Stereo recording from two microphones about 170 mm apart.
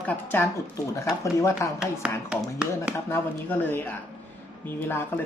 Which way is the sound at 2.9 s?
15° left (ahead or behind).